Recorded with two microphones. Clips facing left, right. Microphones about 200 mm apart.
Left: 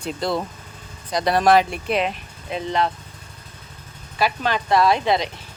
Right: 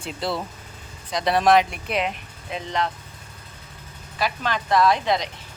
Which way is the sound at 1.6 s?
30° left (ahead or behind).